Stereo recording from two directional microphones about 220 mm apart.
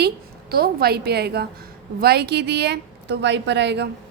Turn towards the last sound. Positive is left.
turn(degrees=-50)  # may be behind; listen again after turning